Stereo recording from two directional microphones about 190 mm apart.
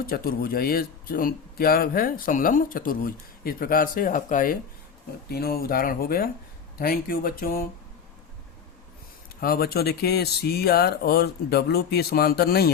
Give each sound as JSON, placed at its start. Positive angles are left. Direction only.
{"t": 0.0, "sound": "speech", "side_deg": 50}
{"t": 9.4, "sound": "speech", "side_deg": 55}